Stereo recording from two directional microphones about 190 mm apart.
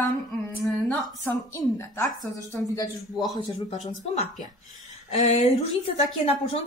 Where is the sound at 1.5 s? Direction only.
15° left (ahead or behind).